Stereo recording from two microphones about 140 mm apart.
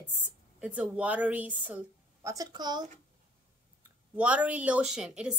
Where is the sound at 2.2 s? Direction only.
25° right (ahead or behind).